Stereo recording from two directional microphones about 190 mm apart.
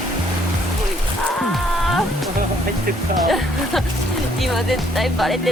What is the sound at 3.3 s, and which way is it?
Speech, centre (ahead or behind).